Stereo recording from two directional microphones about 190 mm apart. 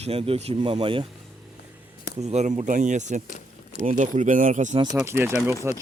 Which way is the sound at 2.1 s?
35° right (ahead or behind).